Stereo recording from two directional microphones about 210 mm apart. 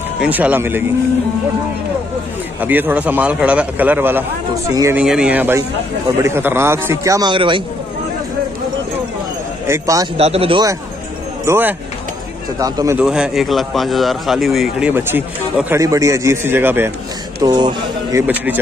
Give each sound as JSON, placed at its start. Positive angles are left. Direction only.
{"t": 0.2, "sound": "a man's voice", "side_deg": -10}
{"t": 2.6, "sound": "a man's voice", "side_deg": -10}
{"t": 9.7, "sound": "a man's voice", "side_deg": -15}
{"t": 10.1, "sound": "speech", "side_deg": -30}
{"t": 11.4, "sound": "a man's voice", "side_deg": -10}
{"t": 13.0, "sound": "a man's voice", "side_deg": -5}
{"t": 18.2, "sound": "a man's voice", "side_deg": -5}